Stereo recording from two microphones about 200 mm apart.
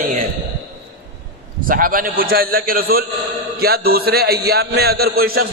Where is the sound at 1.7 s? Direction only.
45° right (ahead or behind).